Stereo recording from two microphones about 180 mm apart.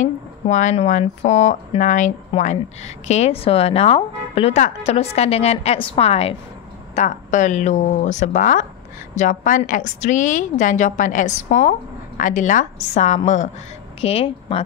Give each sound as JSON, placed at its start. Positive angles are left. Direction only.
{"t": 0.0, "sound": "a woman's voice", "side_deg": 45}